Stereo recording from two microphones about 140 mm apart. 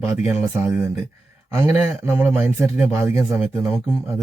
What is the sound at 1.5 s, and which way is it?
Speech, 15° right (ahead or behind).